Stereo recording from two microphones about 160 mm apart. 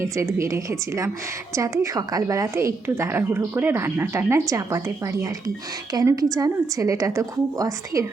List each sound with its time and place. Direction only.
0.0 s a woman's voice: 20° right (ahead or behind)